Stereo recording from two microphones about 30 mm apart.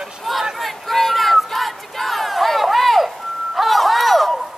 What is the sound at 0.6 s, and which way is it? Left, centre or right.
Battle cry, centre.